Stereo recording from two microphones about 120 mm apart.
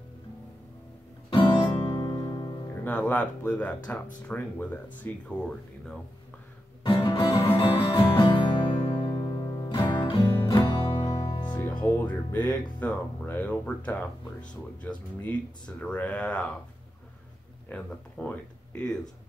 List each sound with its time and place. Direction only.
1.3 s music: 45° left (ahead or behind)
1.9 s music: 30° left (ahead or behind)
2.7 s speech: 15° left (ahead or behind)
7.0 s music: 45° left (ahead or behind)
10.2 s music: 20° left (ahead or behind)
10.5 s music: 40° left (ahead or behind)
11.6 s speech: 20° left (ahead or behind)
15.2 s speech: 10° left (ahead or behind)
17.6 s speech: 15° left (ahead or behind)